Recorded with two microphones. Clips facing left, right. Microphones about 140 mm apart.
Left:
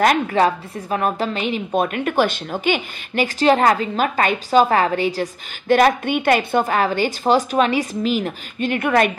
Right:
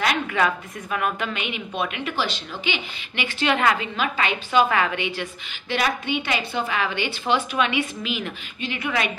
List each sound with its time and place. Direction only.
0.0 s a woman's voice: 40° left (ahead or behind)